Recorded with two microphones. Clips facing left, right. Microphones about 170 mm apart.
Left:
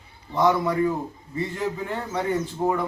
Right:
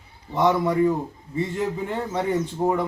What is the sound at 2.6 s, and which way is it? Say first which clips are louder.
Speech: right 1 dB; 10° right (ahead or behind).